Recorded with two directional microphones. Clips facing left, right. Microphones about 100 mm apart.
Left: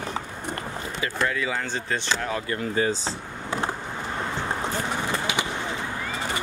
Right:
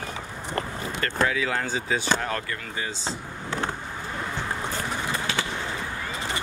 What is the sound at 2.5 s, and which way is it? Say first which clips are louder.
Speech: left 8 dB; 40° left (ahead or behind).